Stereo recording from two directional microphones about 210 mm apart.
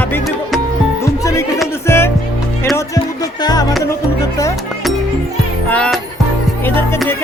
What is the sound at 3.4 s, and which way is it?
Speech, 20° left (ahead or behind).